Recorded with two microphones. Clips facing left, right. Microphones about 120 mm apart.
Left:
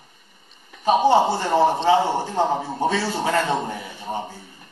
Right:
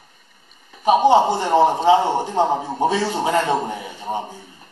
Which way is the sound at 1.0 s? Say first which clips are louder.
Right 2 dB; 15° right (ahead or behind).